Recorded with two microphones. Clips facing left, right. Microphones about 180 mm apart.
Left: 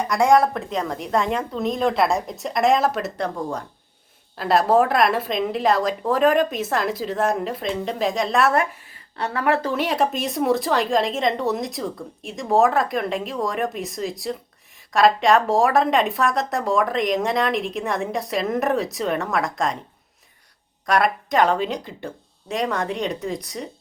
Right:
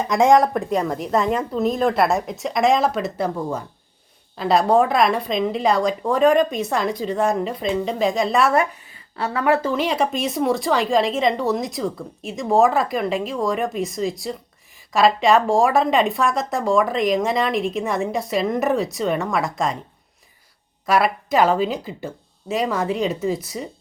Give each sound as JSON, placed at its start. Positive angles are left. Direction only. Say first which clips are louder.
{"t": 0.1, "sound": "speech", "louder": "right 2 dB", "side_deg": -20}
{"t": 0.5, "sound": "speech", "louder": "right 4 dB", "side_deg": -5}
{"t": 20.8, "sound": "speech", "louder": "right 1 dB", "side_deg": -5}